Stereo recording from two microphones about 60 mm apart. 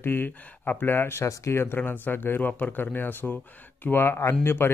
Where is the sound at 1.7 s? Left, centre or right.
Left.